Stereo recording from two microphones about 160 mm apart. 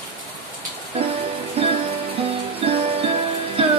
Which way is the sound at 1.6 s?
35° right (ahead or behind).